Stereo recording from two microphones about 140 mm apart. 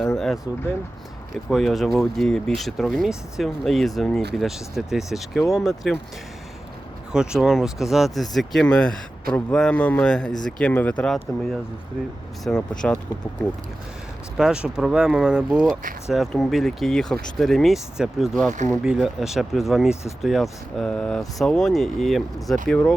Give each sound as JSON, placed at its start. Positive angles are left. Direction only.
{"t": 0.0, "sound": "a sound", "side_deg": 5}
{"t": 1.5, "sound": "speech", "side_deg": 0}
{"t": 7.1, "sound": "speech", "side_deg": -5}
{"t": 14.3, "sound": "speech", "side_deg": -5}